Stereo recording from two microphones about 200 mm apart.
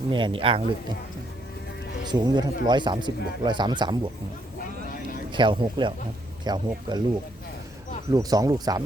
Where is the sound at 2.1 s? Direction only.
20° right (ahead or behind).